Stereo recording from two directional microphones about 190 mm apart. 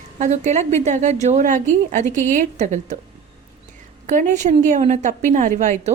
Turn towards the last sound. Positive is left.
turn(degrees=-40)  # may be behind; listen again after turning